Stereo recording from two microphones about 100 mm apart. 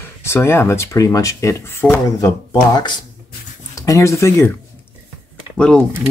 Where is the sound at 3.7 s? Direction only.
30° left (ahead or behind).